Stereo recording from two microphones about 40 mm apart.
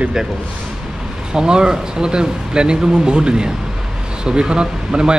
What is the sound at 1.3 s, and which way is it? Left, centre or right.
Speech, right.